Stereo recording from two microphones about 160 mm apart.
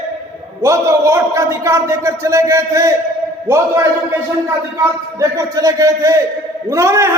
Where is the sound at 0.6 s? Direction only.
20° right (ahead or behind).